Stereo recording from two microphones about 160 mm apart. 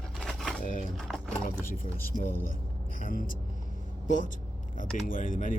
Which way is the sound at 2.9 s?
60° left (ahead or behind).